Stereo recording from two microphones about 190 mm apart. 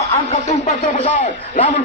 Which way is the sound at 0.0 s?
35° left (ahead or behind).